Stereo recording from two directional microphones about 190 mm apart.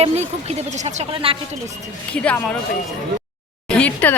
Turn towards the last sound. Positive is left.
turn(degrees=5)  # may be behind; listen again after turning